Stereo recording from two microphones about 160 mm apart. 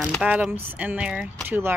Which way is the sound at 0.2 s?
10° right (ahead or behind).